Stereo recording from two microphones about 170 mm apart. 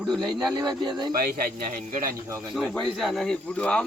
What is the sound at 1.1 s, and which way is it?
A man's voice, 60° right (ahead or behind).